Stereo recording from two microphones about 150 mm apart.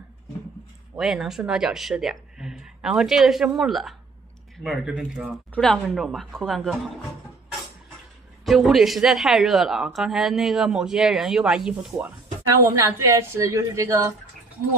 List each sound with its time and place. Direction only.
0.9 s speech: centre (ahead or behind)
8.5 s speech: centre (ahead or behind)
13.0 s speech: 20° right (ahead or behind)